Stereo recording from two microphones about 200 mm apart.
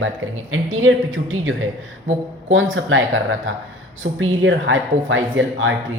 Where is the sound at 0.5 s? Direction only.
85° right.